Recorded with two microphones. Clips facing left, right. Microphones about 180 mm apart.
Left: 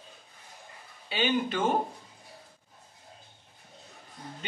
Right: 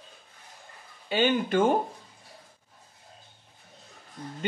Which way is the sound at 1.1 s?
50° right (ahead or behind).